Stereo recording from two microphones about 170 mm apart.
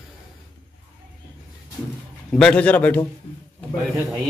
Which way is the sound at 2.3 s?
5° left (ahead or behind).